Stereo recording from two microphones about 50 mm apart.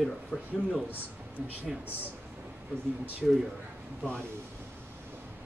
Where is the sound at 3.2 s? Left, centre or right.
Centre.